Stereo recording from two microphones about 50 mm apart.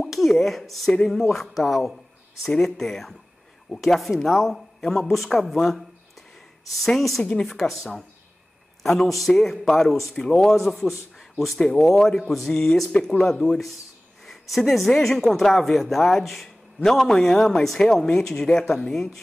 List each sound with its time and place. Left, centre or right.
0.0 s speech: centre